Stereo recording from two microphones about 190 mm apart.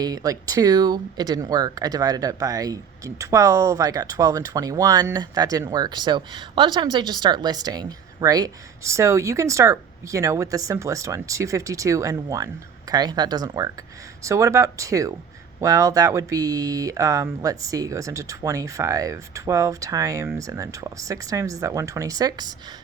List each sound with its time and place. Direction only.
0.0 s speech: 20° right (ahead or behind)